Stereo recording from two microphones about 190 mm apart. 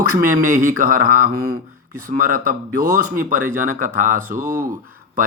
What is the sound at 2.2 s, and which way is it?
Speech, 45° right (ahead or behind).